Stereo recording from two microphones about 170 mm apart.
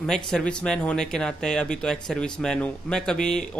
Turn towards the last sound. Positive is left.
turn(degrees=5)  # may be behind; listen again after turning